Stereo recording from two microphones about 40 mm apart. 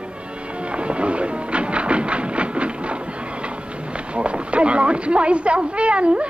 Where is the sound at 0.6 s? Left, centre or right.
Right.